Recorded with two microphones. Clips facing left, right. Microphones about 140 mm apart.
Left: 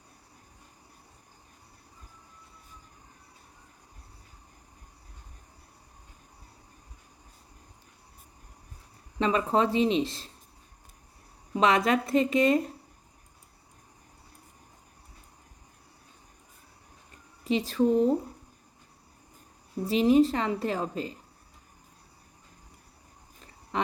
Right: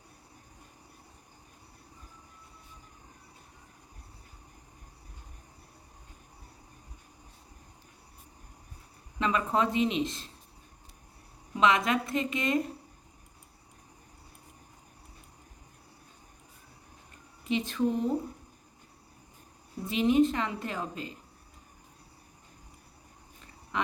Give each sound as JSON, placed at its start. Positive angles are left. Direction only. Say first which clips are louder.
{"t": 9.1, "sound": "a woman's voice", "louder": "left 3 dB", "side_deg": 30}
{"t": 11.5, "sound": "a woman's voice", "louder": "left 2 dB", "side_deg": 35}
{"t": 17.4, "sound": "speech", "louder": "left 4 dB", "side_deg": 35}
{"t": 19.8, "sound": "a woman's voice", "louder": "left 3 dB", "side_deg": 35}
{"t": 23.7, "sound": "a sound", "louder": "left 3 dB", "side_deg": 35}